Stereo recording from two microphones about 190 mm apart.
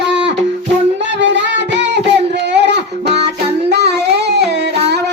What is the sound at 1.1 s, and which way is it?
Music, 70° right (ahead or behind).